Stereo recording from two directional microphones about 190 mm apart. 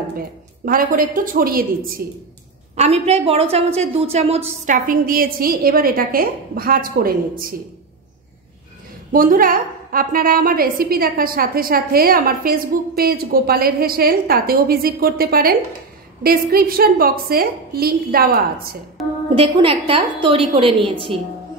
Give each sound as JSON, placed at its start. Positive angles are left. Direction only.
{"t": 0.7, "sound": "a woman's voice", "side_deg": -50}
{"t": 2.7, "sound": "a woman's voice", "side_deg": -35}
{"t": 9.1, "sound": "a woman's voice", "side_deg": -45}
{"t": 19.0, "sound": "a sound", "side_deg": 0}
{"t": 19.3, "sound": "a woman's voice", "side_deg": -30}